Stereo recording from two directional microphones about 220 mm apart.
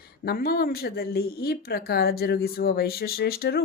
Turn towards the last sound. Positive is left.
turn(degrees=45)  # may be behind; listen again after turning